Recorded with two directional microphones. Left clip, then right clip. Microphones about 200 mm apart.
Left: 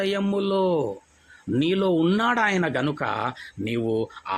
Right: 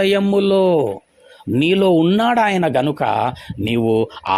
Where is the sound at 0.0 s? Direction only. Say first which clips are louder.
Right 9 dB; 35° right (ahead or behind).